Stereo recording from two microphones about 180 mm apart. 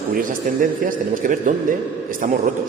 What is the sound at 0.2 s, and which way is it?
A man's voice, 50° right (ahead or behind).